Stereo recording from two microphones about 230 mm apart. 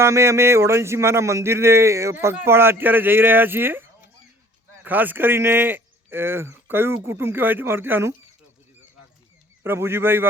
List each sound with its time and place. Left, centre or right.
0.0 s speech: centre
9.6 s speech: centre